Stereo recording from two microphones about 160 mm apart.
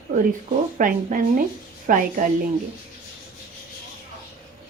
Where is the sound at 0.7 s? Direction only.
60° right (ahead or behind).